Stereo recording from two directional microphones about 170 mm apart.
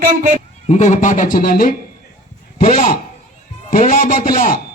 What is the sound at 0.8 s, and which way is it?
A man's voice, 45° left (ahead or behind).